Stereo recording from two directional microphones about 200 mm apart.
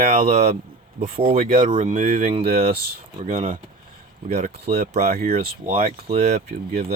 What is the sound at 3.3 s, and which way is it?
Speech, 40° right (ahead or behind).